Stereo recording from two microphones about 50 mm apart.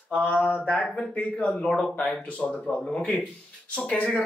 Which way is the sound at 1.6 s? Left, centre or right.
Centre.